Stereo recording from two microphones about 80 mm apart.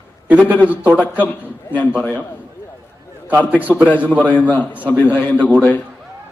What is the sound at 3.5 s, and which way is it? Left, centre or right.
Speech, right.